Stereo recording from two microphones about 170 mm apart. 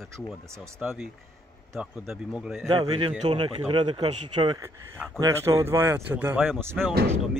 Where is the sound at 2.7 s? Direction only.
30° right (ahead or behind).